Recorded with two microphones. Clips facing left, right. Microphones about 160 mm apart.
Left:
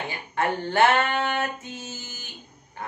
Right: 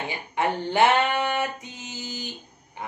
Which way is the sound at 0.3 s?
15° right (ahead or behind).